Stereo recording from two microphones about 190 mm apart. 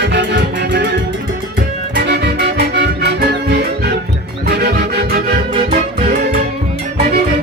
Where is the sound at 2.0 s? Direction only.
60° right (ahead or behind).